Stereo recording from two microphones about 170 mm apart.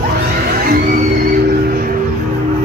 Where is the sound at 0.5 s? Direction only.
55° right (ahead or behind).